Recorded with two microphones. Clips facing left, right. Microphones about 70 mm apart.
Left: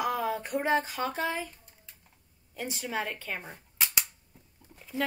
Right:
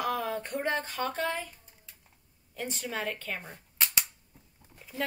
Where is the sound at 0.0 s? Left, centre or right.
Centre.